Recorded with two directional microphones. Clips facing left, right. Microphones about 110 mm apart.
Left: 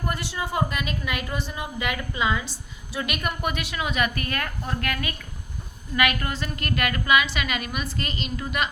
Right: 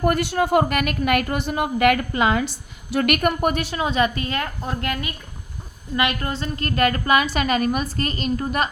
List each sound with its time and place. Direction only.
0.0 s a woman's voice: 60° right (ahead or behind); by 8.7 s 40° right (ahead or behind)